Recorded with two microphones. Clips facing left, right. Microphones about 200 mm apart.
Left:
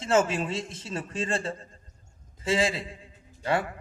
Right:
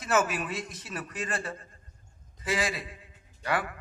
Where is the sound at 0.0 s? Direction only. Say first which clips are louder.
Left 4 dB; 25° left (ahead or behind).